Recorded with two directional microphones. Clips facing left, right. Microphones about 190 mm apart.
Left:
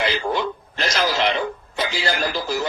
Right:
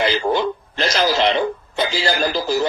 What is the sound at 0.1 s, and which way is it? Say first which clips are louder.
Speech: right 4 dB; 30° right (ahead or behind).